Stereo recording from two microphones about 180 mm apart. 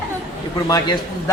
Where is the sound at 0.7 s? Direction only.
25° left (ahead or behind).